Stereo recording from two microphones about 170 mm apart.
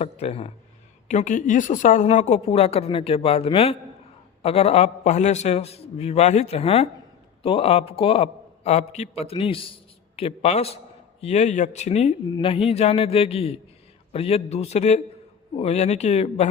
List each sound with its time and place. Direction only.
0.0 s a woman's voice: 35° left (ahead or behind)